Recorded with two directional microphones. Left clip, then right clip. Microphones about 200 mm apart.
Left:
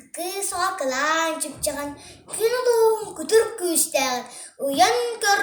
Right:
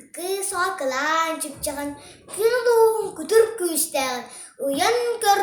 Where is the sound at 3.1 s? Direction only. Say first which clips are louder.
Right 1 dB; 10° right (ahead or behind).